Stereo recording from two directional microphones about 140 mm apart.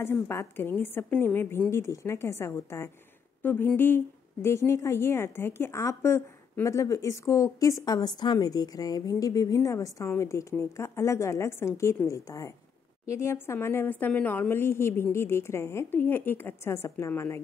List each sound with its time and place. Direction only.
0.0 s a woman's voice: 20° left (ahead or behind)